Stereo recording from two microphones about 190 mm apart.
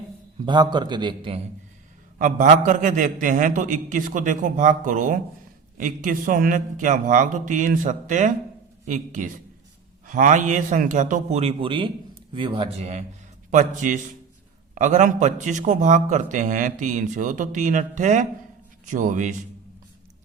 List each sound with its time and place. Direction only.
0.4 s a man's voice: 25° right (ahead or behind)
2.1 s a man's voice: 45° right (ahead or behind)